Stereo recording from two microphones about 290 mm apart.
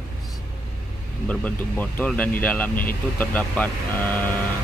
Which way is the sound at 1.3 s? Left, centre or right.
Centre.